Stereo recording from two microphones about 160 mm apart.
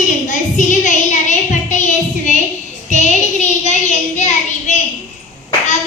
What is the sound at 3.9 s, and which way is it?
Child singing, 45° left (ahead or behind).